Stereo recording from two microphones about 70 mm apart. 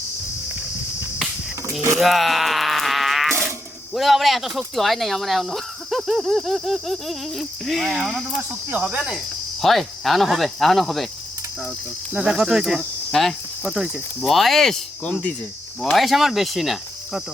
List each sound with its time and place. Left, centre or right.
2.0 s wail: centre
3.9 s speech: centre
8.9 s cricket: centre
9.6 s speech: centre
12.1 s cricket: centre
13.7 s speech: centre
15.0 s speech: centre
15.8 s speech: centre